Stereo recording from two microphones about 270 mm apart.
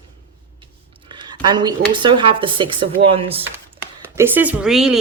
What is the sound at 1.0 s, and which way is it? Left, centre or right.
A woman's voice, centre.